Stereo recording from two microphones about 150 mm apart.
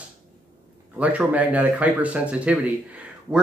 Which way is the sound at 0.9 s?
10° right (ahead or behind).